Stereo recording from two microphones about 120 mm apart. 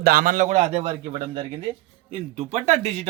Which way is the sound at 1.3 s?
45° right (ahead or behind).